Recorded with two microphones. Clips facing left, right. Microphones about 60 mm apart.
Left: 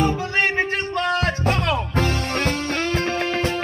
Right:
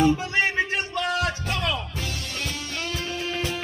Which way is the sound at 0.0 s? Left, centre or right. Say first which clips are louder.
Left 1 dB; left.